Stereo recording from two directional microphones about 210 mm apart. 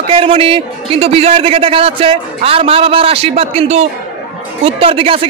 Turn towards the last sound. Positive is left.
turn(degrees=-25)  # may be behind; listen again after turning